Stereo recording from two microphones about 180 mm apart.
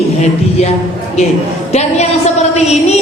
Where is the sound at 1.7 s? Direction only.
40° left (ahead or behind).